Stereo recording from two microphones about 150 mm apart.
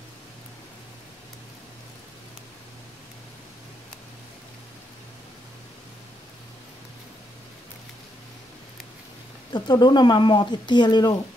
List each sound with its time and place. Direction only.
9.5 s speech: 30° left (ahead or behind)